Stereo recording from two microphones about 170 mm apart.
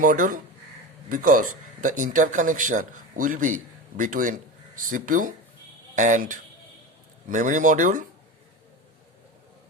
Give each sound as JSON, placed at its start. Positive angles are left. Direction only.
{"t": 0.0, "sound": "speech", "side_deg": -55}